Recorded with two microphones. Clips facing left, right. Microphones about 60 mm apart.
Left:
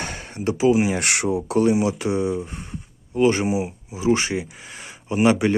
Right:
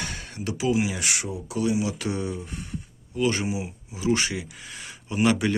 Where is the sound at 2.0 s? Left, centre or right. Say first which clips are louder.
Left 7 dB; left.